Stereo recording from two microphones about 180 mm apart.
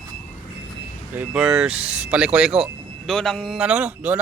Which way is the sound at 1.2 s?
5° right (ahead or behind).